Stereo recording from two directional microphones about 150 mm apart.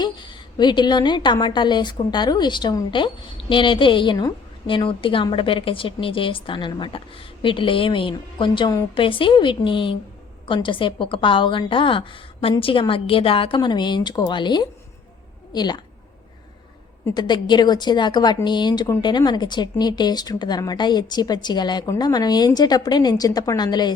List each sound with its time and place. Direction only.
0.0 s a woman's voice: 30° left (ahead or behind)
17.2 s a woman's voice: 30° left (ahead or behind)